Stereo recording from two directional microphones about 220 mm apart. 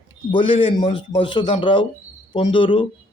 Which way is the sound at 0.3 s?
25° left (ahead or behind).